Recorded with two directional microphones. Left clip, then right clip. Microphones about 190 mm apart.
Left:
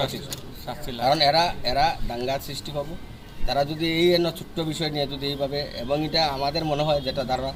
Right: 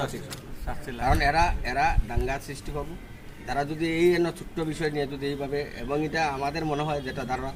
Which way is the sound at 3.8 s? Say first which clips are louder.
Left 1 dB; 25° left (ahead or behind).